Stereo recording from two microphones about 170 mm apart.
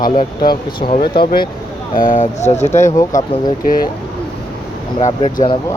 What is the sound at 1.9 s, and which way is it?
Speech, 50° left (ahead or behind).